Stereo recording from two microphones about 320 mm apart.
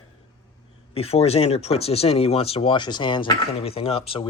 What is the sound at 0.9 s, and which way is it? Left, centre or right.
Speech, centre.